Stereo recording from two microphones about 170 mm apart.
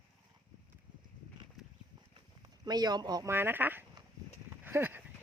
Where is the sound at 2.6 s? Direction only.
25° right (ahead or behind).